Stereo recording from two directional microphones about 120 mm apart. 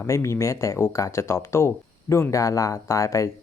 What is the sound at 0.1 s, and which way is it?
Speech, 25° left (ahead or behind).